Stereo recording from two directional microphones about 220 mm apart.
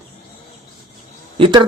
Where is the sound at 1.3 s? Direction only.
25° right (ahead or behind).